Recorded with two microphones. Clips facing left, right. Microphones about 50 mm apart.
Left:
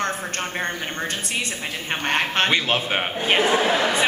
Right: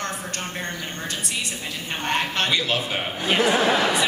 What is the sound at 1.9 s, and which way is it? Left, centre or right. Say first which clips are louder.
A man's voice: left 2 dB; left.